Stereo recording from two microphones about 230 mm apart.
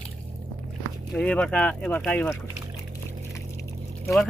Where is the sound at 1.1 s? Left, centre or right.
Centre.